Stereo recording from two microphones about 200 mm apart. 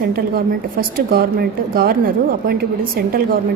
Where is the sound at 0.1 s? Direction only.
45° right (ahead or behind).